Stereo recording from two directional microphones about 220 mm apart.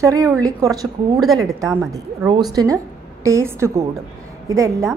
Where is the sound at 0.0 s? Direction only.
15° right (ahead or behind).